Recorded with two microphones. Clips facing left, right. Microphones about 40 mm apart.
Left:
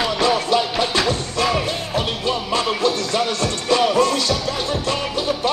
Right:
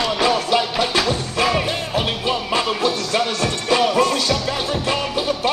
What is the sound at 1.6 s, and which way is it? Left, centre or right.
Music, centre.